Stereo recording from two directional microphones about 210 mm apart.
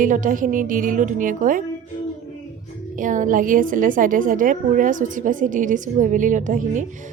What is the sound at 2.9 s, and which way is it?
A woman's voice, 40° right (ahead or behind).